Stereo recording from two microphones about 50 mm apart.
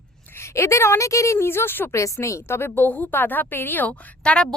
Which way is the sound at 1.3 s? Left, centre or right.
Left.